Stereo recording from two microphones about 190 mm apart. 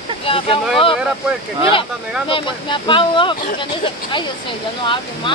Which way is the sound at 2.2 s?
25° left (ahead or behind).